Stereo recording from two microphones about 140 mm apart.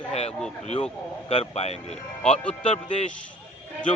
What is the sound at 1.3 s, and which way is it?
Speech, 50° left (ahead or behind).